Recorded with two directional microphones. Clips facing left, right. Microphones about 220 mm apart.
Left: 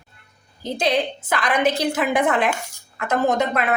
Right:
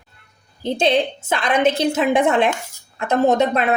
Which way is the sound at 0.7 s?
25° right (ahead or behind).